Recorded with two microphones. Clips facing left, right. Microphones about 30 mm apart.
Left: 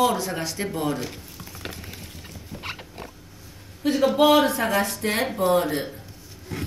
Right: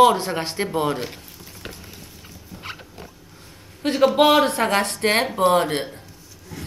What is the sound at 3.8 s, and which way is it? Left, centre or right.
Speech, right.